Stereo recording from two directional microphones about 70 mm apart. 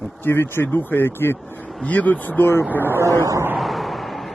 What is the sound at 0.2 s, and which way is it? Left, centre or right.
Speech, left.